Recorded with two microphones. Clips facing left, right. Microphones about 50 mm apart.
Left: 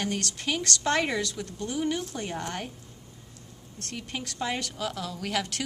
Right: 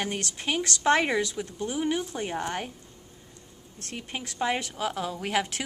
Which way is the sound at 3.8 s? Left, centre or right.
Centre.